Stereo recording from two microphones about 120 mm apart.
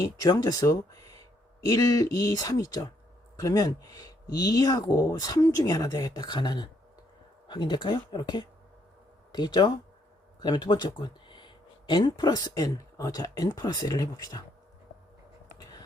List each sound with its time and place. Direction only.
0.0 s speech: 30° left (ahead or behind)